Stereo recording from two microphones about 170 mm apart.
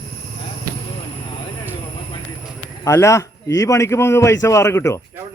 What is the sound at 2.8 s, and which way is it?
A man's voice, 15° left (ahead or behind).